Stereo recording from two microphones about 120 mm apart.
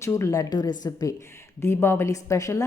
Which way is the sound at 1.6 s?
20° left (ahead or behind).